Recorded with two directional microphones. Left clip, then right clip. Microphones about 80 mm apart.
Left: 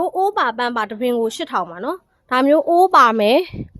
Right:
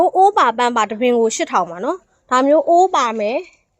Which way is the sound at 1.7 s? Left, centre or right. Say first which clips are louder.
Right 3 dB; centre.